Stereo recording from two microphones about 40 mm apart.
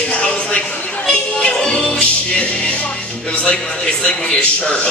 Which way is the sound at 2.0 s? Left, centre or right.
Left.